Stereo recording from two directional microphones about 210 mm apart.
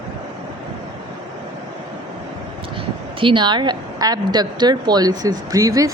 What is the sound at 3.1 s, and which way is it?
A woman's voice, 25° right (ahead or behind).